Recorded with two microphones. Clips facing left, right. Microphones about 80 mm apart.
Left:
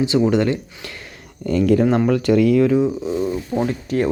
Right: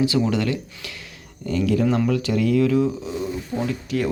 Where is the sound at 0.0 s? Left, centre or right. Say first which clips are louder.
Left 4 dB; left.